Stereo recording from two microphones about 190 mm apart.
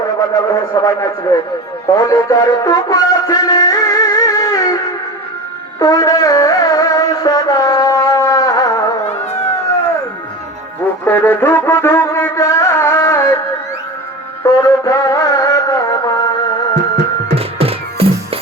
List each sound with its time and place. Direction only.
0.2 s speech: 20° left (ahead or behind)
1.9 s music: 20° left (ahead or behind)
5.8 s music: 20° left (ahead or behind)
9.0 s a sound: 35° left (ahead or behind)
11.0 s music: 10° left (ahead or behind)
14.4 s music: 15° left (ahead or behind)
17.3 s music: 30° right (ahead or behind)